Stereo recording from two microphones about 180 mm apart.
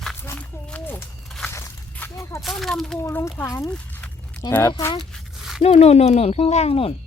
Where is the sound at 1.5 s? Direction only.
15° left (ahead or behind).